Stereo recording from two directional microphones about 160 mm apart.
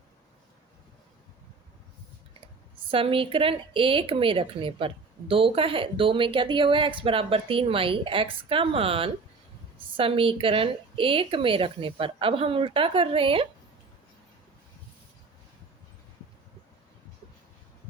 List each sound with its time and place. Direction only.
2.9 s speech: 35° right (ahead or behind)